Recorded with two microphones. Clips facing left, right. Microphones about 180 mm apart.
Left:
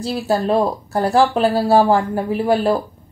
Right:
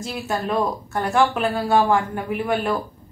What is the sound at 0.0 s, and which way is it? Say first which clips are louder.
A woman's voice: left 7 dB; 30° left (ahead or behind).